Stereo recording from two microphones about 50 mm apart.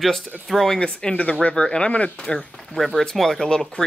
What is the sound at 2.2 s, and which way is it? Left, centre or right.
Speech, centre.